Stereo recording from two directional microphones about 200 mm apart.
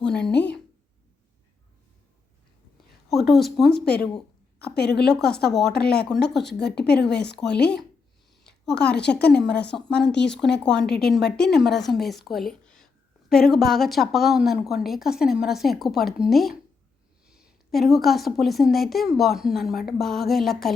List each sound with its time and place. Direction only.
0.0 s speech: 5° left (ahead or behind)
0.3 s a woman's voice: 60° left (ahead or behind)
3.1 s a woman's voice: centre (ahead or behind)
4.6 s a woman's voice: 55° left (ahead or behind)
4.9 s a woman's voice: 5° left (ahead or behind)
5.5 s a woman's voice: 55° left (ahead or behind)
8.9 s a woman's voice: 55° left (ahead or behind)
9.7 s a woman's voice: 5° left (ahead or behind)
10.7 s a woman's voice: 55° left (ahead or behind)
11.3 s a woman's voice: 5° left (ahead or behind)